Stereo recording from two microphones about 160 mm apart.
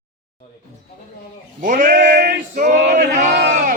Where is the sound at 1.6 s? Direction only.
55° right (ahead or behind).